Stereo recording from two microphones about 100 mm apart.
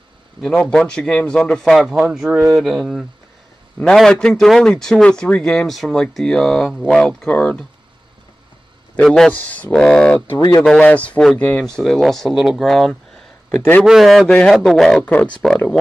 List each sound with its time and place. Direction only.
0.4 s speech: 5° left (ahead or behind)
8.9 s speech: 5° left (ahead or behind)
10.2 s speech: 55° left (ahead or behind)
10.6 s speech: 10° left (ahead or behind)
15.0 s speech: 15° left (ahead or behind)